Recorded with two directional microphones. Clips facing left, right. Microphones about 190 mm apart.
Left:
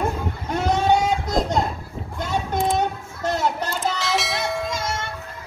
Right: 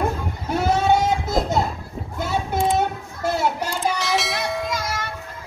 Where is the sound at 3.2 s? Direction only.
10° right (ahead or behind).